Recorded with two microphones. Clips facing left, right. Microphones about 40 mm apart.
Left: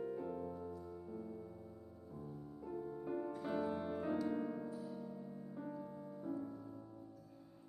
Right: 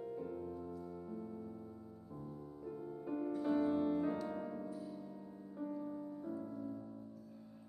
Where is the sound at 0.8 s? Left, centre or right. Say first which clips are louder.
Right 2 dB; centre.